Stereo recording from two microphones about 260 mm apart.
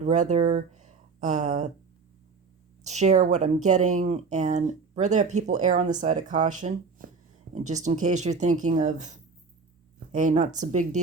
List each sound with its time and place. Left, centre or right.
0.0 s speech: right
2.8 s speech: right